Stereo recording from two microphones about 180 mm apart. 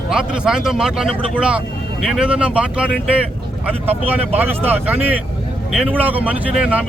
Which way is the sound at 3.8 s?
35° right (ahead or behind).